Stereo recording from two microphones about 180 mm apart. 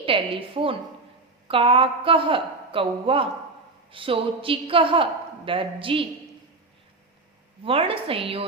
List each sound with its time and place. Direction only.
0.0 s a woman's voice: 30° right (ahead or behind)
7.6 s a woman's voice: 30° right (ahead or behind)